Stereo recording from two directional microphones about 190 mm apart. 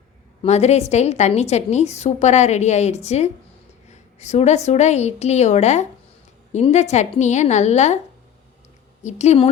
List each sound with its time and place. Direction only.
0.4 s a woman's voice: 35° left (ahead or behind)
9.0 s a woman's voice: 35° left (ahead or behind)